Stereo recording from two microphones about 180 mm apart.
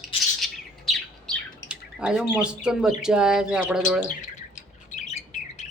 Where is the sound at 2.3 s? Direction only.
5° right (ahead or behind).